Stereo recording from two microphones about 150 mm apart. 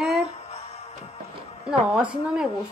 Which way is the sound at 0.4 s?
45° left (ahead or behind).